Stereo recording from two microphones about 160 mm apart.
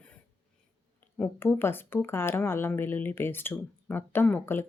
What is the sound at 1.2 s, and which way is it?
A woman's voice, 10° left (ahead or behind).